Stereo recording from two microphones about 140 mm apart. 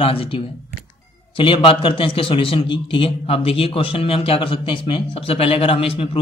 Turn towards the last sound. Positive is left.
turn(degrees=40)  # may be behind; listen again after turning